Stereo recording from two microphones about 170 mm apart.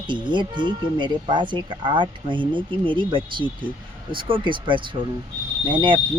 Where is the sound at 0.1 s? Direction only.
25° right (ahead or behind).